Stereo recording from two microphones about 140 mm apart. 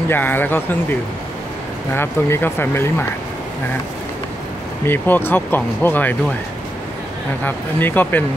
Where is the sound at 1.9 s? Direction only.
15° left (ahead or behind).